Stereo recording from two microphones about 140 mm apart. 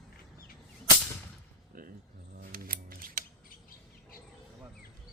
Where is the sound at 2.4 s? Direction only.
90° right.